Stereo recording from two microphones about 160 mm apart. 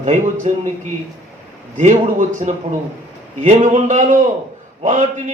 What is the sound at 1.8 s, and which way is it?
A man's voice, 50° right (ahead or behind).